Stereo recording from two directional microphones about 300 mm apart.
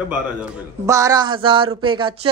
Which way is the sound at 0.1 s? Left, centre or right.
Centre.